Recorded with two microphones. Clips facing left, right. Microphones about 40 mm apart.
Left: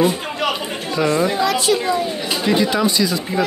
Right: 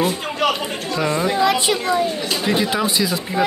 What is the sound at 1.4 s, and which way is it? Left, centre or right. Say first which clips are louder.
Speech: even; right.